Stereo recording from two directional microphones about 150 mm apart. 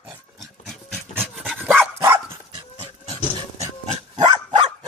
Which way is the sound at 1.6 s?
15° right (ahead or behind).